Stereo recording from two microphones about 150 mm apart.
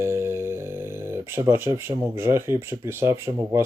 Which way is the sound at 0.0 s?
20° right (ahead or behind).